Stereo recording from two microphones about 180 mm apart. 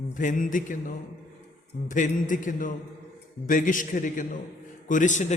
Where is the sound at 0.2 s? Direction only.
45° left (ahead or behind).